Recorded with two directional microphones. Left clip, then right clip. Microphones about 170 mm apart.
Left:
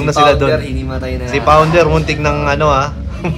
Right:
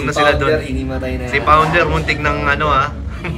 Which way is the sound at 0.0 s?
25° left (ahead or behind).